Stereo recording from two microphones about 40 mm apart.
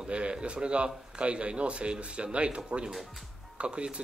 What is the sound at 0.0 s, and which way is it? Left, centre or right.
Speech, right.